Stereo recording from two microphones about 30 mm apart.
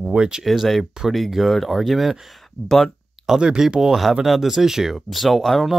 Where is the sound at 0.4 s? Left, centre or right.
Centre.